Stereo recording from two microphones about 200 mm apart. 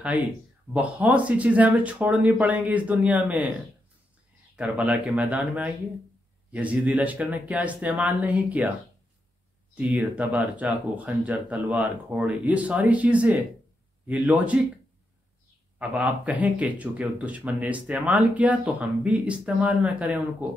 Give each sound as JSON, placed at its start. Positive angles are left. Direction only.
{"t": 0.7, "sound": "speech", "side_deg": -5}
{"t": 4.6, "sound": "speech", "side_deg": -5}
{"t": 9.8, "sound": "speech", "side_deg": -5}
{"t": 15.8, "sound": "speech", "side_deg": -5}